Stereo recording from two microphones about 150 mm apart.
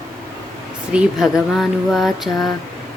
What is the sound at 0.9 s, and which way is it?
Speech, 5° right (ahead or behind).